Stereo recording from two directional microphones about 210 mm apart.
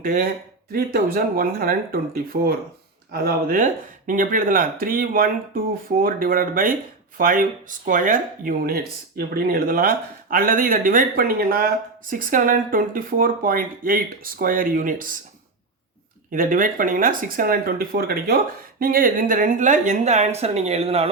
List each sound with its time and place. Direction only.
0.0 s speech: 40° right (ahead or behind)
16.3 s speech: 40° right (ahead or behind)